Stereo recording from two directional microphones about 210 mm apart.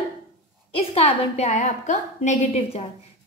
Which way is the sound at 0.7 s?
30° left (ahead or behind).